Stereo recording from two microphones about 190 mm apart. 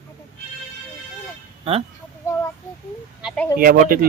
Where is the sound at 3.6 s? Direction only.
50° right (ahead or behind).